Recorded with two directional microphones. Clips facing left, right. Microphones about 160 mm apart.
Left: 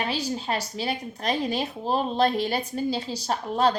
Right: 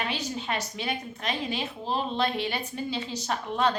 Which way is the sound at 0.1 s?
35° left (ahead or behind).